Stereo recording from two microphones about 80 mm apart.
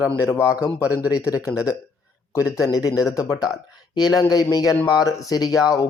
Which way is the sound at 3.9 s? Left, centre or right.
Left.